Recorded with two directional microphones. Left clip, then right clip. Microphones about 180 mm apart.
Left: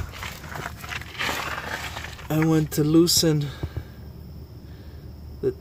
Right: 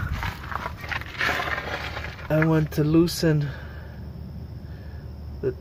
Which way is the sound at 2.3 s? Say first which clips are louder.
Even; 30° left (ahead or behind).